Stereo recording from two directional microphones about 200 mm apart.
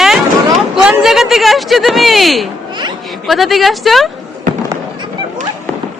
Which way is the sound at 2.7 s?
20° right (ahead or behind).